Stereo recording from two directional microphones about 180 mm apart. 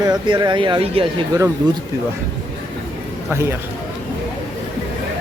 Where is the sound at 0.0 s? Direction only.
25° right (ahead or behind).